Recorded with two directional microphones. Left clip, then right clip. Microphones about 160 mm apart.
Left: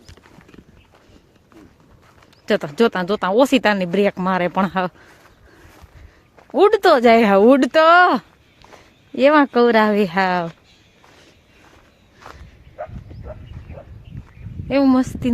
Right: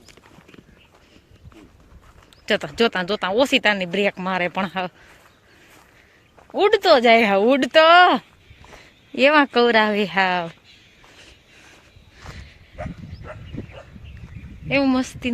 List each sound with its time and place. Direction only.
0.0 s horse: 25° left (ahead or behind)
2.5 s speech: 30° left (ahead or behind)
6.5 s speech: 45° left (ahead or behind); by 8.2 s 30° left (ahead or behind)
9.1 s speech: 15° left (ahead or behind)
12.2 s walk: centre (ahead or behind)
14.7 s speech: 30° left (ahead or behind)